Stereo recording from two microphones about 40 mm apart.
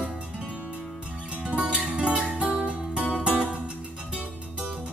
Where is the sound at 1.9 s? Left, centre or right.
Right.